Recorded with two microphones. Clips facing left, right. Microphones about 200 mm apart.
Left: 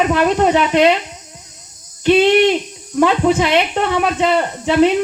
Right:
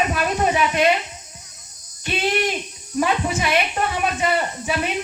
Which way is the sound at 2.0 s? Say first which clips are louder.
Left 11 dB; 75° left (ahead or behind).